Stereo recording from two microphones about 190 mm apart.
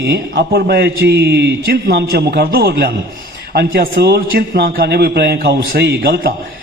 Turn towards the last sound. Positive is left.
turn(degrees=-55)  # may be behind; listen again after turning